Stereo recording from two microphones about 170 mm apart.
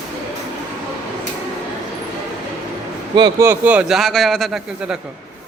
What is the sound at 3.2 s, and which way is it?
Speech, 25° right (ahead or behind).